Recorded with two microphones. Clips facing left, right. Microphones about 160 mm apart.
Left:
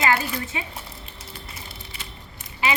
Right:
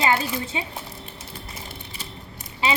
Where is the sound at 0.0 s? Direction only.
25° right (ahead or behind).